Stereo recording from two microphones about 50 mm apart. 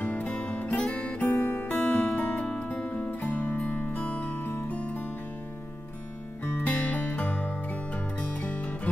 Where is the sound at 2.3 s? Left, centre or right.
Centre; by 4.7 s left.